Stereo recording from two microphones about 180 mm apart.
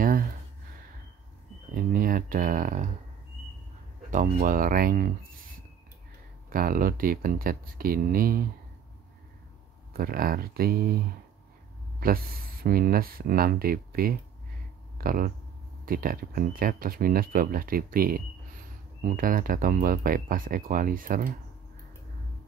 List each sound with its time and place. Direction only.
1.8 s a sound: 50° right (ahead or behind)
4.1 s speech: 45° right (ahead or behind)
6.5 s speech: 55° right (ahead or behind)
9.9 s speech: 55° right (ahead or behind)
12.6 s speech: 55° right (ahead or behind)